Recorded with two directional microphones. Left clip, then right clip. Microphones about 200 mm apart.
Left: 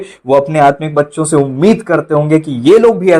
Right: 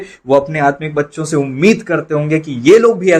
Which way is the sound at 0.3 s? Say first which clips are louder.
Left 4 dB; 20° left (ahead or behind).